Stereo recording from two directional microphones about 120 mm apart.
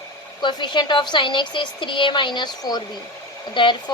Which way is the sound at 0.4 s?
40° left (ahead or behind).